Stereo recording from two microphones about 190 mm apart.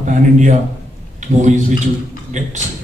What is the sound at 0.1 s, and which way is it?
A man's voice, 40° right (ahead or behind).